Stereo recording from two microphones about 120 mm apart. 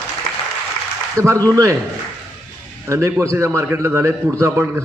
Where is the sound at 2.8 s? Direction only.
20° right (ahead or behind).